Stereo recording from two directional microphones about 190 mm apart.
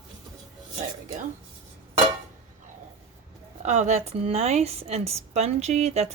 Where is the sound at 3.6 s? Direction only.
35° right (ahead or behind).